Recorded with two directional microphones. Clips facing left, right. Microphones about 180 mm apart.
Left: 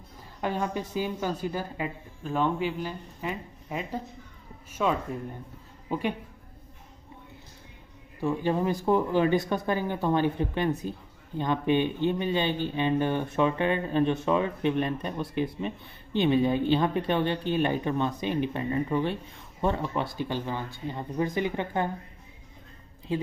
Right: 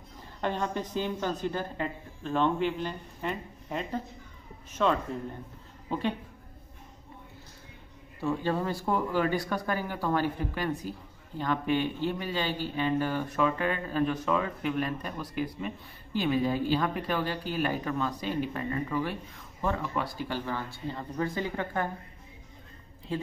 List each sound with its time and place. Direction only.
0.4 s a woman's voice: 10° left (ahead or behind)
8.2 s speech: 15° left (ahead or behind)